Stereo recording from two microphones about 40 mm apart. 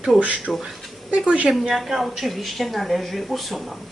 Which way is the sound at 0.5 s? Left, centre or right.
Centre.